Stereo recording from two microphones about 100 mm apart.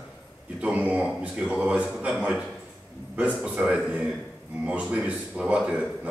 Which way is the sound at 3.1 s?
15° right (ahead or behind).